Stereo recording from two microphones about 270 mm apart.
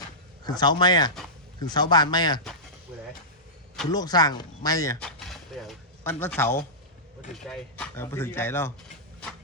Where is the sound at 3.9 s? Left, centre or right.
Centre.